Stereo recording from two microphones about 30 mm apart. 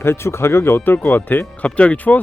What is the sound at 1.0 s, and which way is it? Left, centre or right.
Speech, left.